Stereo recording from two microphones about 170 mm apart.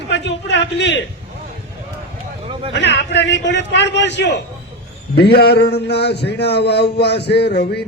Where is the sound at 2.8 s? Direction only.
90° left.